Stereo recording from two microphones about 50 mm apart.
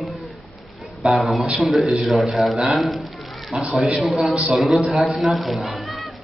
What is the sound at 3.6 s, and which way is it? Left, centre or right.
Speech, centre.